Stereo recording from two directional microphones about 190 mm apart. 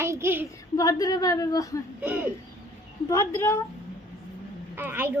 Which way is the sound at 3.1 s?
15° left (ahead or behind).